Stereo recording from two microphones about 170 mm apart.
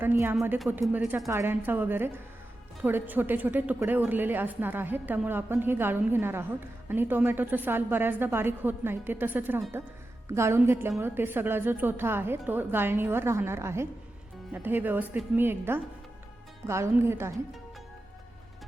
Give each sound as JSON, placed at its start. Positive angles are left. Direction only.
{"t": 0.0, "sound": "a woman's voice", "side_deg": -10}